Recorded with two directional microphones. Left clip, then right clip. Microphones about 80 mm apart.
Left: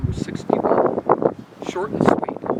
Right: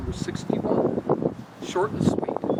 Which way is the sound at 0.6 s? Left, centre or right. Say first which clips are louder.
Left 6 dB; left.